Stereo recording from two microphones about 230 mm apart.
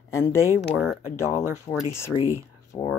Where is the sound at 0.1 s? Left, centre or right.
Centre.